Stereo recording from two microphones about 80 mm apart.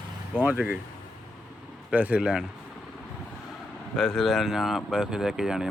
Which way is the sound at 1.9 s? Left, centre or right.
Centre.